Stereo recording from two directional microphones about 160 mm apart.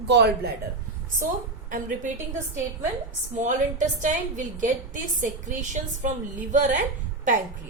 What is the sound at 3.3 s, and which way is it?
A woman's voice, 50° right (ahead or behind).